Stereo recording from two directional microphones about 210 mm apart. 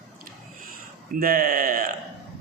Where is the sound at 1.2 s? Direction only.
45° right (ahead or behind).